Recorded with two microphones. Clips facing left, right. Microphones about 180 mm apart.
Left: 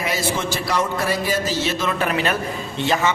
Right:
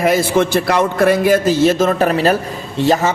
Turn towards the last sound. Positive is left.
turn(degrees=-40)  # may be behind; listen again after turning